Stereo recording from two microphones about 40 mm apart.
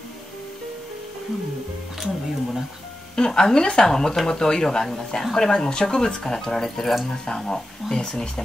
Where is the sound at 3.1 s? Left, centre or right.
Centre.